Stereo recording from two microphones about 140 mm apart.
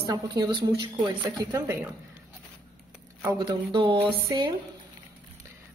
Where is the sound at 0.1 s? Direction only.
30° right (ahead or behind).